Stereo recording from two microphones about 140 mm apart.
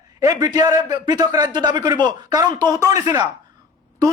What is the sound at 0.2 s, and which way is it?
A man's voice, 25° right (ahead or behind).